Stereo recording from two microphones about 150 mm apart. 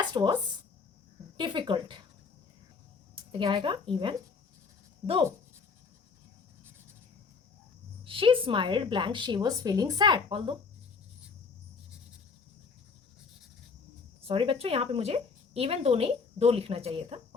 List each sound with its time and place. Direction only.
0.0 s a sound: 30° right (ahead or behind)
1.4 s a woman's voice: 30° right (ahead or behind)
3.3 s a woman's voice: 30° right (ahead or behind)
8.0 s a woman's voice: 35° right (ahead or behind)
14.2 s a woman's voice: 40° right (ahead or behind)